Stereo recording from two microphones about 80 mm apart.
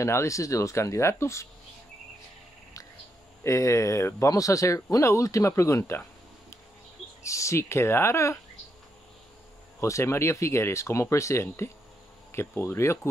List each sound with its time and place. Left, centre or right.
0.0 s speech: left
3.4 s speech: left
7.2 s speech: left
9.8 s speech: left